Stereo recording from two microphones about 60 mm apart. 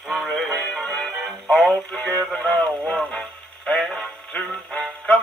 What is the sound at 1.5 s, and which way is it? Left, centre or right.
Music, centre.